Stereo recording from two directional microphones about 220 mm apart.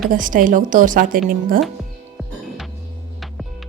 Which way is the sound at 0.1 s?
40° right (ahead or behind).